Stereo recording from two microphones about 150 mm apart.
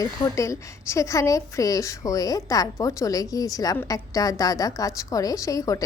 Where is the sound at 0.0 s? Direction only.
20° left (ahead or behind).